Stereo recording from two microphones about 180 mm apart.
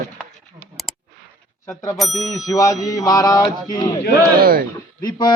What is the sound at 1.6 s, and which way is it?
Speech, 20° left (ahead or behind).